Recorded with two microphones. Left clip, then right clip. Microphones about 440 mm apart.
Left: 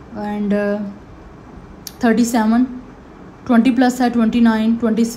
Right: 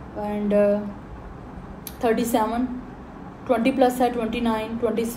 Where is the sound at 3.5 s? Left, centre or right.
Left.